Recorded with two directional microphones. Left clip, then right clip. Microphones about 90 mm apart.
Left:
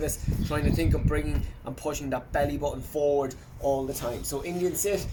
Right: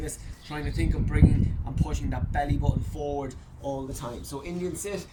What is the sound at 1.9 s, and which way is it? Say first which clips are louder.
Speech: left 9 dB; 5° right (ahead or behind).